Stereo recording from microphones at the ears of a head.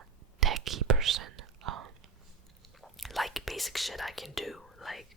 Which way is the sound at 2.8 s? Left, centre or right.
Centre.